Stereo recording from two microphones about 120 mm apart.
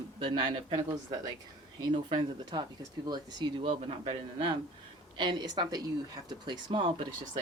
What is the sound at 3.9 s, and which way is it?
Speech, 50° right (ahead or behind).